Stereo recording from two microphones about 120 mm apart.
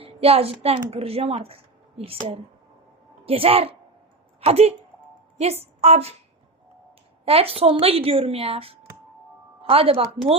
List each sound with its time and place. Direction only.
0.0 s a woman's voice: 55° right (ahead or behind)
7.3 s a woman's voice: 55° right (ahead or behind)